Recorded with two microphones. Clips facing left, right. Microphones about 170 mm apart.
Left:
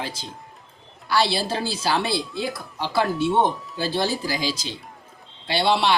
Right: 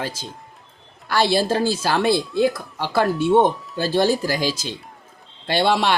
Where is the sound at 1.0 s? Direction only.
50° right (ahead or behind).